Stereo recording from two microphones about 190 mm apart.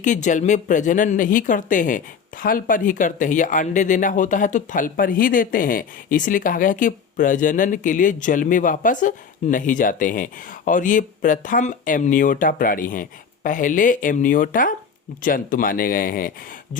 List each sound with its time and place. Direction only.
0.0 s speech: 40° left (ahead or behind)